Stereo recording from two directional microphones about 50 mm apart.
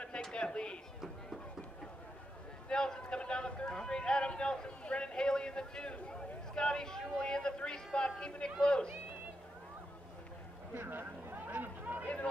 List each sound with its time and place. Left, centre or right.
0.3 s speech: centre
2.7 s speech: centre
10.7 s a sound: right